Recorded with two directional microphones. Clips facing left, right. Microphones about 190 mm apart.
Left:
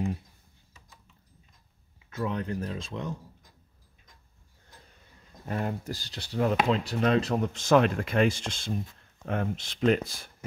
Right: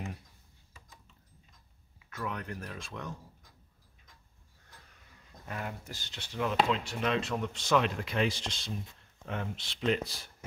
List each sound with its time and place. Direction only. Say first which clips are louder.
2.0 s speech: left 7 dB; 25° left (ahead or behind)
5.4 s speech: left 8 dB; 35° left (ahead or behind); by 10.3 s 50° left (ahead or behind)